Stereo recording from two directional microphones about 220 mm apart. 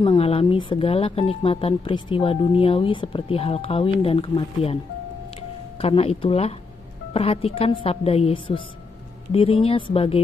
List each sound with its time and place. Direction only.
0.0 s speech: 25° left (ahead or behind)
5.8 s speech: 25° left (ahead or behind)